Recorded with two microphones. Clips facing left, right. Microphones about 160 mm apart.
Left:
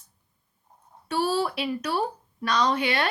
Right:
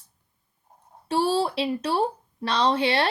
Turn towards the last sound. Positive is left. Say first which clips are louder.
# right 2 dB
turn(degrees=-30)  # may be behind; listen again after turning